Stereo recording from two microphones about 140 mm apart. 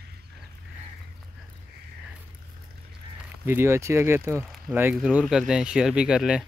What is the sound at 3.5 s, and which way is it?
Speech, 15° right (ahead or behind).